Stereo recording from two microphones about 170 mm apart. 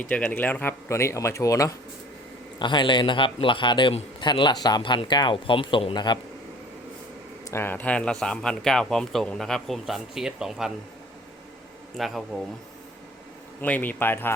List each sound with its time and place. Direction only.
0.0 s a man's voice: 10° left (ahead or behind); by 6.1 s 25° left (ahead or behind)
7.5 s speech: 10° left (ahead or behind); by 10.7 s 5° right (ahead or behind)
11.9 s speech: centre (ahead or behind)
13.6 s speech: 10° left (ahead or behind)